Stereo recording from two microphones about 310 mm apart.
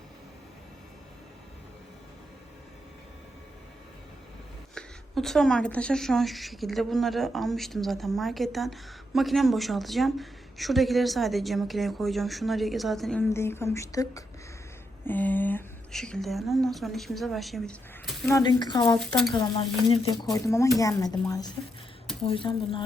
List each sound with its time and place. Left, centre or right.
4.7 s a woman's voice: centre
19.3 s stir: centre